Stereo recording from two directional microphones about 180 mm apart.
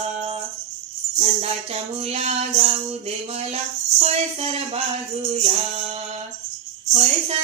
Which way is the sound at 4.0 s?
35° right (ahead or behind).